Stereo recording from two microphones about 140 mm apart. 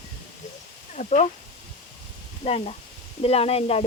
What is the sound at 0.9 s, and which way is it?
Speech, 55° left (ahead or behind).